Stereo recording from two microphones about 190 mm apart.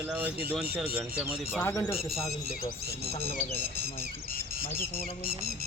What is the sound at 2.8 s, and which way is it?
Speech, 55° right (ahead or behind).